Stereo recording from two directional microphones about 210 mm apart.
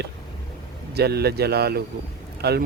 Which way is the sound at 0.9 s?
50° right (ahead or behind).